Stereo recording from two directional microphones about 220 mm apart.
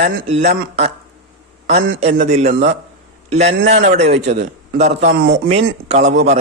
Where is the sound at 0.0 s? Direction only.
35° right (ahead or behind).